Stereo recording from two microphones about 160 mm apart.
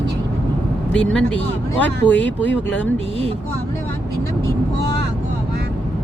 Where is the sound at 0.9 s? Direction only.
5° left (ahead or behind).